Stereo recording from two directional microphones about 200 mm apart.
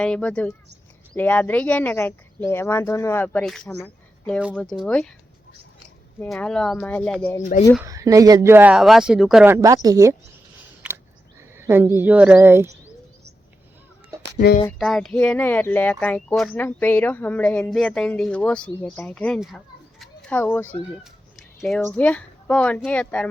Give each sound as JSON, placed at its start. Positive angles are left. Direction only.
{"t": 0.0, "sound": "speech", "side_deg": 5}
{"t": 6.1, "sound": "speech", "side_deg": 5}
{"t": 7.9, "sound": "speech", "side_deg": -15}
{"t": 9.6, "sound": "speech", "side_deg": -15}
{"t": 10.8, "sound": "a sound", "side_deg": -5}
{"t": 11.5, "sound": "speech", "side_deg": -10}
{"t": 14.3, "sound": "speech", "side_deg": 45}
{"t": 14.7, "sound": "speech", "side_deg": 0}
{"t": 21.0, "sound": "cat", "side_deg": 0}
{"t": 21.8, "sound": "speech", "side_deg": 10}